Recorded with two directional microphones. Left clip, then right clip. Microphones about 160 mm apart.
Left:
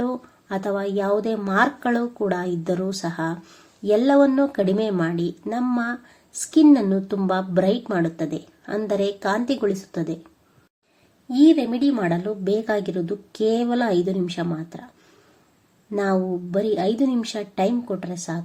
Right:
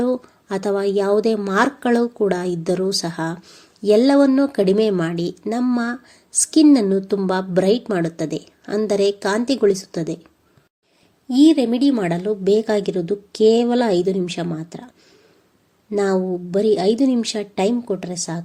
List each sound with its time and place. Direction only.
0.0 s a woman's voice: 45° right (ahead or behind)
11.3 s a woman's voice: 50° right (ahead or behind)
15.9 s a woman's voice: 40° right (ahead or behind)